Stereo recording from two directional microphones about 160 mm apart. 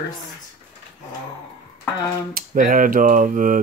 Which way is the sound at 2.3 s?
60° right (ahead or behind).